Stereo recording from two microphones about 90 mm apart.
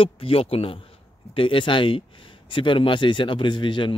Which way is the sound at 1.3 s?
75° left (ahead or behind).